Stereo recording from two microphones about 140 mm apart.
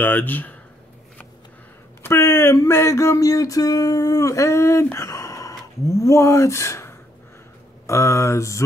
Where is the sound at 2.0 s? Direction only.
15° left (ahead or behind).